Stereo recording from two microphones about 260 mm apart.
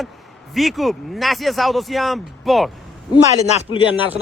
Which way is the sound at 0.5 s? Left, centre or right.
Centre.